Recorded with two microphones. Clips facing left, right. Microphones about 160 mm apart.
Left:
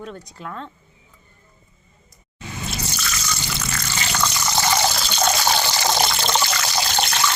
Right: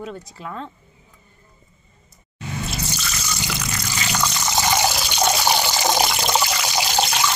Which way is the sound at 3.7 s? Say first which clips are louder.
Right 1 dB; 15° right (ahead or behind).